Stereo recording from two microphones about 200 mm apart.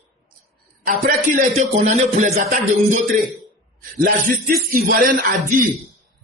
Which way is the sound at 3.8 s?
45° right (ahead or behind).